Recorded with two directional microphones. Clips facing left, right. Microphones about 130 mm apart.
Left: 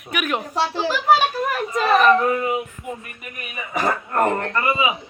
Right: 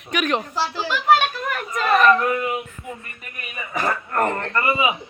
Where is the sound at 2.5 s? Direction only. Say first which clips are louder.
Left 3 dB; 15° left (ahead or behind).